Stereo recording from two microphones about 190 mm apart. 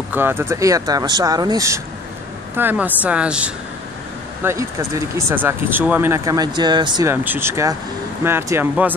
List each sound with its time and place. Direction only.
0.1 s speech: 10° right (ahead or behind)